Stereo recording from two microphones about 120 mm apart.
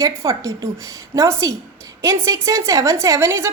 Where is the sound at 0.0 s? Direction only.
25° right (ahead or behind).